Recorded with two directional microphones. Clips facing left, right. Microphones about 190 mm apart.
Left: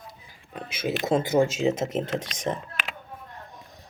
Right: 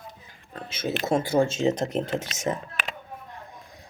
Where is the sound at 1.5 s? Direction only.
5° left (ahead or behind).